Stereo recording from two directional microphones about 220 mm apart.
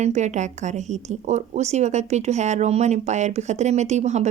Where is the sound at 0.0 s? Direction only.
30° right (ahead or behind).